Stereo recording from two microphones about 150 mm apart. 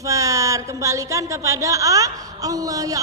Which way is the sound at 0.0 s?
20° right (ahead or behind).